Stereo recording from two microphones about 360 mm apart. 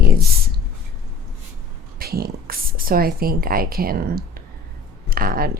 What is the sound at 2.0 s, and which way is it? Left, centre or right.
Speech, right.